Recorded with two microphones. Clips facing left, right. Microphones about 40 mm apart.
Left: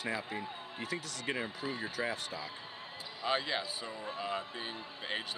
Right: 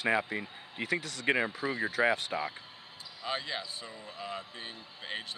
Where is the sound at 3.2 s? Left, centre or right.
Centre.